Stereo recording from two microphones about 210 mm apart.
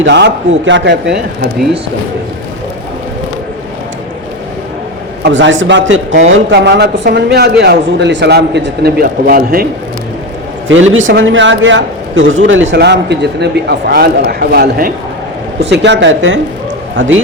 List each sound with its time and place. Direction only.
0.0 s a man's voice: 60° right (ahead or behind)
5.2 s a man's voice: 60° right (ahead or behind); by 9.6 s 45° right (ahead or behind)
10.7 s a man's voice: 65° right (ahead or behind)
12.7 s speech: 55° right (ahead or behind)
15.7 s a man's voice: 55° right (ahead or behind)